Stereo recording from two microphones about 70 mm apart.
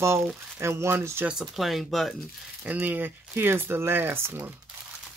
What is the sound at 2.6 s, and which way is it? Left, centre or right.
Speech, right.